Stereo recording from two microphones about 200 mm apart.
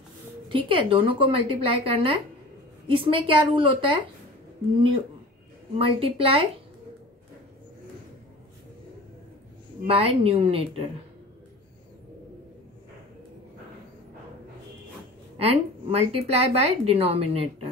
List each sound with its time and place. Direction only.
0.5 s a woman's voice: 25° right (ahead or behind)
5.8 s a woman's voice: 30° right (ahead or behind)
9.8 s a woman's voice: 30° right (ahead or behind)
15.3 s a woman's voice: 30° right (ahead or behind)